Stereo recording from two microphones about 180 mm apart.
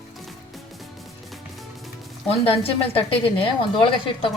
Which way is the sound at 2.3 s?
30° left (ahead or behind).